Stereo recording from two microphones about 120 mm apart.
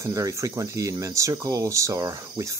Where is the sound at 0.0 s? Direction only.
25° right (ahead or behind).